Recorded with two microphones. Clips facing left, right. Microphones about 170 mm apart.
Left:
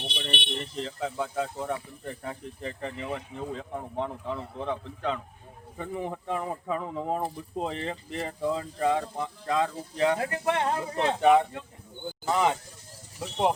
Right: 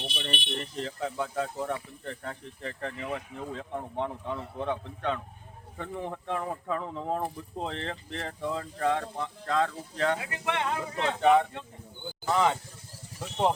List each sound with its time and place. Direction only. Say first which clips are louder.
0.1 s speech: left 1 dB; centre (ahead or behind)
10.2 s speech: left 5 dB; 40° left (ahead or behind)
11.2 s speech: left 1 dB; 15° left (ahead or behind)